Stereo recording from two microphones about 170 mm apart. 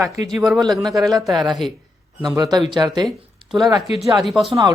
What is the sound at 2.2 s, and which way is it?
Speech, 20° right (ahead or behind).